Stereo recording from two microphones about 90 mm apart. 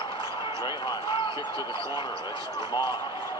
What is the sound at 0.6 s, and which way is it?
Speech, 55° left (ahead or behind).